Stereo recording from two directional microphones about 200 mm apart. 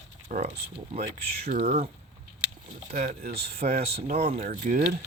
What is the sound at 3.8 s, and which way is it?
Speech, 30° right (ahead or behind).